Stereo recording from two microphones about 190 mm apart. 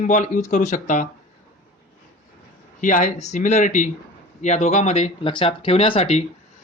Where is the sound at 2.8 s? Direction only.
40° left (ahead or behind).